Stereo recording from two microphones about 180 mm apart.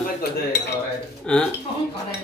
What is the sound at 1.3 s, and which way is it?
Speech, 5° left (ahead or behind).